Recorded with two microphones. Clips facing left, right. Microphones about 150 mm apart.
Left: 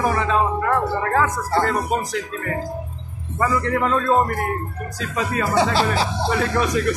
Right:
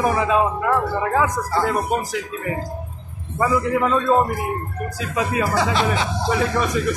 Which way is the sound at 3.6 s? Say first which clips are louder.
Right 1 dB; 5° right (ahead or behind).